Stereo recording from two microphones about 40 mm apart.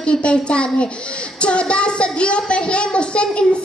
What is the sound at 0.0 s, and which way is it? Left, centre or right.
A child's voice, left.